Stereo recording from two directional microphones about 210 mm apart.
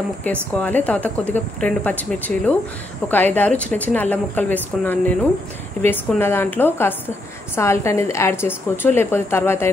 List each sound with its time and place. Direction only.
0.3 s a woman's voice: 5° left (ahead or behind)